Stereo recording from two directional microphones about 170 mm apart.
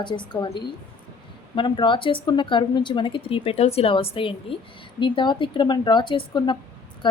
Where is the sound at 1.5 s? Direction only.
30° left (ahead or behind).